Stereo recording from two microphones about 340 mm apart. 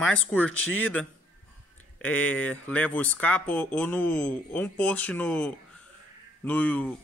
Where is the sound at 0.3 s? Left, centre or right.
Centre.